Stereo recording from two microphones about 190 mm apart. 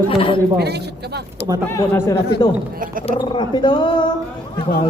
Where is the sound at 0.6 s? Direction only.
60° right (ahead or behind).